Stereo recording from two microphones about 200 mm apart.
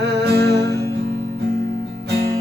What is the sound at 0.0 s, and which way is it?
Music, 55° right (ahead or behind).